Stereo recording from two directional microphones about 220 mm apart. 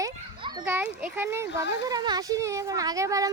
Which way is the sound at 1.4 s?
50° left (ahead or behind).